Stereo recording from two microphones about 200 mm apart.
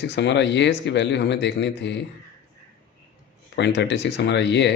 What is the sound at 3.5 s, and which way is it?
Speech, 60° left (ahead or behind).